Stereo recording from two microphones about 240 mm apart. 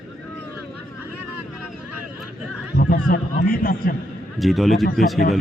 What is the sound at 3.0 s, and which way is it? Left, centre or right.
Speech, left.